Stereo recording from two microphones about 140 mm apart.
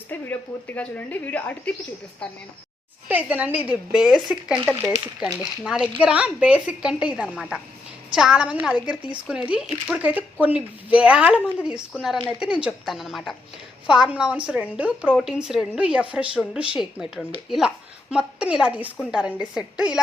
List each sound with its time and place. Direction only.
0.1 s speech: 10° left (ahead or behind)
3.1 s a woman's voice: 10° right (ahead or behind)